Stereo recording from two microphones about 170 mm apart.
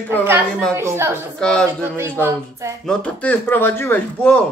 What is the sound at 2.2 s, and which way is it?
Speech, 15° right (ahead or behind).